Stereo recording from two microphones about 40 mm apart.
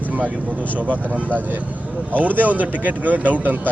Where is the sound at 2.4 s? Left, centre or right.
Right.